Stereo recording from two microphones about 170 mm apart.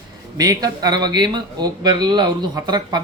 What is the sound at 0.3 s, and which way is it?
Speech, 20° right (ahead or behind).